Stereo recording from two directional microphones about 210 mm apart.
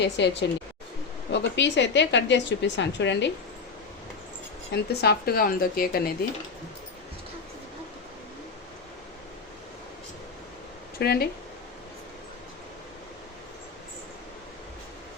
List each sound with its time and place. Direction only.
0.0 s speech: 55° left (ahead or behind)
4.7 s speech: 50° left (ahead or behind)
11.0 s speech: 50° left (ahead or behind)